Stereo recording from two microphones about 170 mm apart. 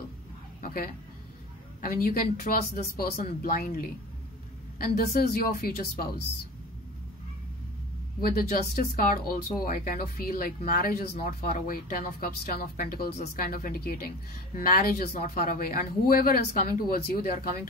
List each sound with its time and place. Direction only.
1.8 s speech: 60° left (ahead or behind)
8.2 s speech: 60° left (ahead or behind)